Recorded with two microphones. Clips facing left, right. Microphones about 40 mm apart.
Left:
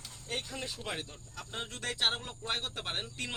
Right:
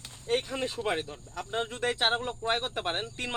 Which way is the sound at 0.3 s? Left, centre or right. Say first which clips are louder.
Right 9 dB; right.